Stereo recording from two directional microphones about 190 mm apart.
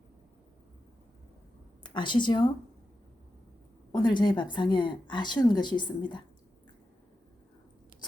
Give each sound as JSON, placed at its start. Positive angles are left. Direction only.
{"t": 1.8, "sound": "a woman's voice", "side_deg": 25}
{"t": 3.9, "sound": "a woman's voice", "side_deg": 25}